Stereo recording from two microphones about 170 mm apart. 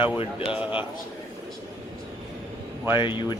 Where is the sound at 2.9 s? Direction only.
25° left (ahead or behind).